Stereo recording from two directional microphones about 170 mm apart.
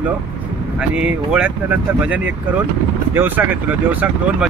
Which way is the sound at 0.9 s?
5° right (ahead or behind).